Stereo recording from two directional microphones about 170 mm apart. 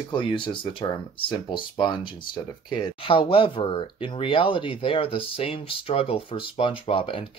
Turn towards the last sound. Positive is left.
turn(degrees=30)  # may be behind; listen again after turning